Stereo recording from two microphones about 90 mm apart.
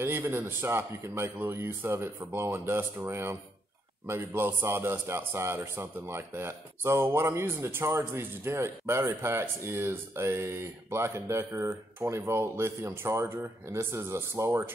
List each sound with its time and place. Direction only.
0.0 s a man's voice: 25° right (ahead or behind)